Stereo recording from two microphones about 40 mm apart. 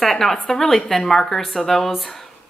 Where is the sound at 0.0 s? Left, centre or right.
Centre.